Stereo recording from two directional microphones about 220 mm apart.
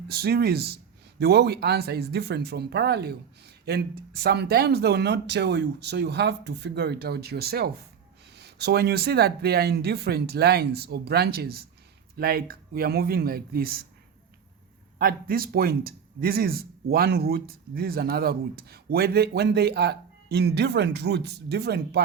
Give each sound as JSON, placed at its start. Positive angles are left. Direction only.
{"t": 0.1, "sound": "speech", "side_deg": -45}
{"t": 14.9, "sound": "speech", "side_deg": -40}